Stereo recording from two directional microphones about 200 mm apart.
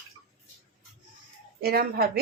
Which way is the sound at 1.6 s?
50° right (ahead or behind).